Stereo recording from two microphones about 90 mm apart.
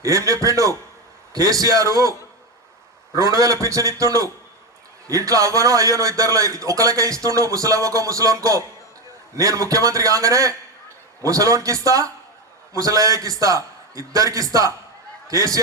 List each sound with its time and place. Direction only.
0.0 s a man's voice: 35° right (ahead or behind)
3.2 s a man's voice: 40° right (ahead or behind)